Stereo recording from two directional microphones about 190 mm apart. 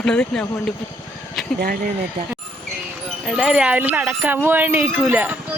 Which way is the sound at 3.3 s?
Centre (ahead or behind).